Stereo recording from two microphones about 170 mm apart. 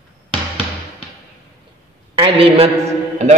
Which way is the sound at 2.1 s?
30° right (ahead or behind).